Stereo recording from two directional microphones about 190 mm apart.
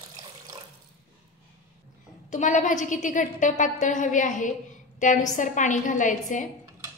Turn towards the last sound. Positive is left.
turn(degrees=40)  # may be behind; listen again after turning